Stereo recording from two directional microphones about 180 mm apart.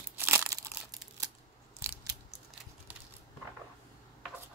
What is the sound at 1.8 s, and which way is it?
Scissors, 15° right (ahead or behind).